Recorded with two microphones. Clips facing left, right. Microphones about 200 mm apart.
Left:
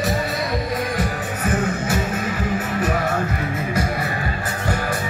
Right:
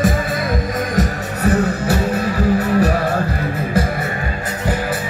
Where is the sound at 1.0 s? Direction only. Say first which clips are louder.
Right 5 dB; 35° right (ahead or behind).